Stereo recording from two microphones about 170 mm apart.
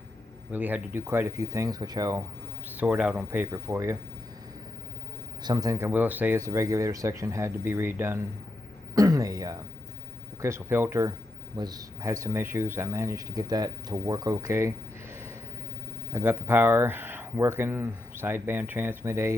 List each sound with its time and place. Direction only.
0.5 s speech: 10° right (ahead or behind)
2.7 s speech: 10° right (ahead or behind)
5.4 s speech: 25° right (ahead or behind)
9.0 s a sound: 20° right (ahead or behind)
10.4 s speech: 15° right (ahead or behind)
16.1 s speech: 15° right (ahead or behind)